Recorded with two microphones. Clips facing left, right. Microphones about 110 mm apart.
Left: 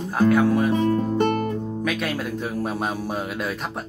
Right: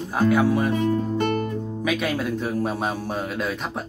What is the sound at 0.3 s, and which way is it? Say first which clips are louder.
Speech: left 1 dB; 5° right (ahead or behind).